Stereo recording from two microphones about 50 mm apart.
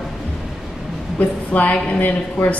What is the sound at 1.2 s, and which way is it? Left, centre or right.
A woman's voice, left.